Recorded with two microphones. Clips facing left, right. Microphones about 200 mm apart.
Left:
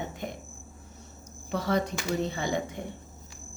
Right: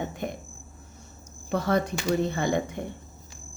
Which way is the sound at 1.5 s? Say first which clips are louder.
Right 3 dB; 50° right (ahead or behind).